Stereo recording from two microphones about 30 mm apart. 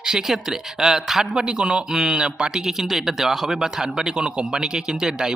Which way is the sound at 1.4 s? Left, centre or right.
Right.